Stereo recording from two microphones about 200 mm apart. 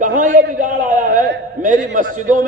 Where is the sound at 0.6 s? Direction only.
40° right (ahead or behind).